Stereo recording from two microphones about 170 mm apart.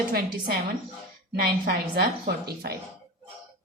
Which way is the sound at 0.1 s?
65° right (ahead or behind).